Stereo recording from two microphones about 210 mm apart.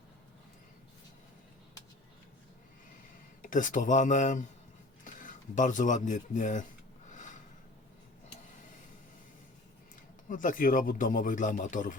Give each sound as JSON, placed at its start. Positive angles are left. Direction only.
{"t": 3.4, "sound": "speech", "side_deg": 40}
{"t": 7.1, "sound": "a sound", "side_deg": 35}
{"t": 10.2, "sound": "speech", "side_deg": 40}